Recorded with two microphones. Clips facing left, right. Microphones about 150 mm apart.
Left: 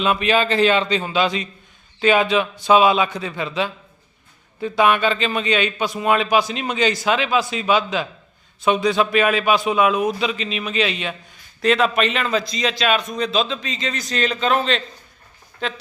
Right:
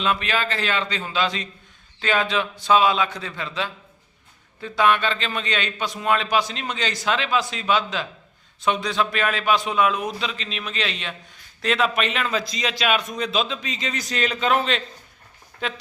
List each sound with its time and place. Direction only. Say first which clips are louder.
0.0 s a man's voice: left 5 dB; 15° left (ahead or behind); by 14.8 s 10° right (ahead or behind)